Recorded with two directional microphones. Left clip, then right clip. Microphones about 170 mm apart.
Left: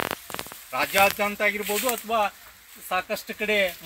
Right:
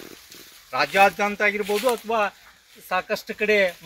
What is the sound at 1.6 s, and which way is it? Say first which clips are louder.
Speech: right 4 dB; 10° left (ahead or behind).